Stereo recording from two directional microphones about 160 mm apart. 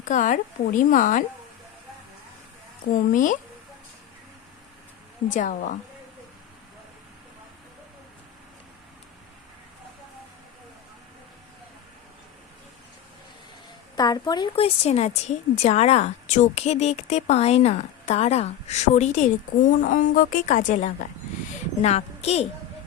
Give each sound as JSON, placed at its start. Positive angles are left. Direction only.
{"t": 0.0, "sound": "a woman's voice", "side_deg": 50}
{"t": 2.9, "sound": "a woman's voice", "side_deg": 55}
{"t": 5.3, "sound": "a woman's voice", "side_deg": 50}
{"t": 13.9, "sound": "a woman's voice", "side_deg": 25}
{"t": 19.8, "sound": "a woman's voice", "side_deg": 60}